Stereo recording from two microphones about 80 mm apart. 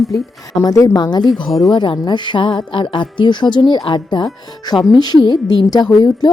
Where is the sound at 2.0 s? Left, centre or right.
Left.